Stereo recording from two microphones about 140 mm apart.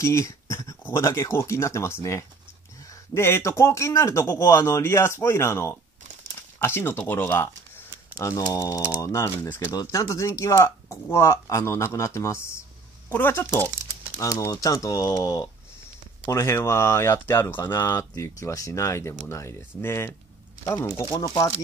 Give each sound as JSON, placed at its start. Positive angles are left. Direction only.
{"t": 0.0, "sound": "speech", "side_deg": 20}